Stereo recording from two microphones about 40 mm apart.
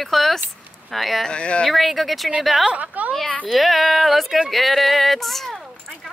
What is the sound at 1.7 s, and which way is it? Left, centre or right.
Speech, centre.